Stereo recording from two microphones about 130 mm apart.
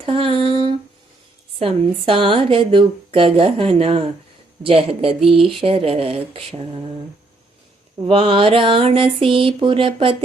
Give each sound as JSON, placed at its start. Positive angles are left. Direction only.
{"t": 0.0, "sound": "a woman's voice", "side_deg": -45}
{"t": 1.5, "sound": "a woman's voice", "side_deg": -45}
{"t": 8.0, "sound": "a woman's voice", "side_deg": -45}